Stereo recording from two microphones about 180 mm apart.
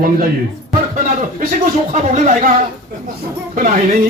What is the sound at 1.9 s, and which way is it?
Speech, 40° right (ahead or behind).